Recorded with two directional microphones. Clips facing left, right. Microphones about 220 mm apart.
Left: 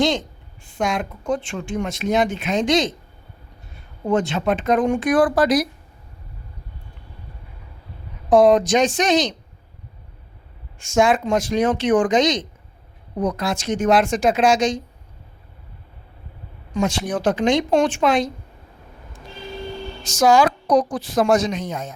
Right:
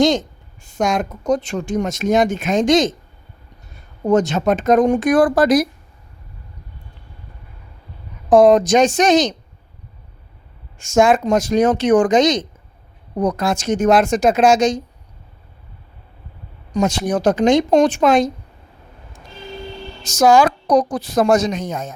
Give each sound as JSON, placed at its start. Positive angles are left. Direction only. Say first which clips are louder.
{"t": 0.0, "sound": "a woman's voice", "louder": "right 5 dB", "side_deg": -45}
{"t": 4.0, "sound": "a woman's voice", "louder": "right 4 dB", "side_deg": -40}
{"t": 8.3, "sound": "a woman's voice", "louder": "right 3 dB", "side_deg": -45}
{"t": 10.8, "sound": "a woman's voice", "louder": "right 3 dB", "side_deg": -45}
{"t": 16.7, "sound": "a woman's voice", "louder": "right 4 dB", "side_deg": -40}
{"t": 20.1, "sound": "a woman's voice", "louder": "right 3 dB", "side_deg": -45}